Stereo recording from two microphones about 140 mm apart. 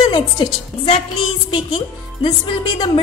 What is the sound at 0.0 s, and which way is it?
A woman's voice, 40° left (ahead or behind).